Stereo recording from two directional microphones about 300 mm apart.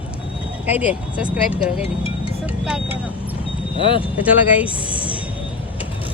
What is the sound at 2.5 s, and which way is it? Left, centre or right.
Speech, centre.